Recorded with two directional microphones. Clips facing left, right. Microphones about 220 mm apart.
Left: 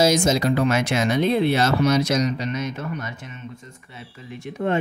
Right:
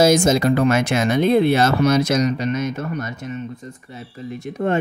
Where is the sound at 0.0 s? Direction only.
55° right (ahead or behind).